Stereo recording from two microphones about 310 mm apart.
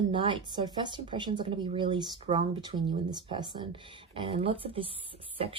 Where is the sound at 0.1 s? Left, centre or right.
Centre.